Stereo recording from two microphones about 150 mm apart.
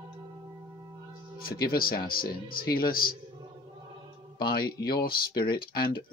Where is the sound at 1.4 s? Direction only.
85° left.